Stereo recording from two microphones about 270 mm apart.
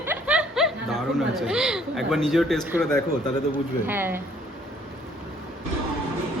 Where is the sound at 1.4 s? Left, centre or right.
Centre.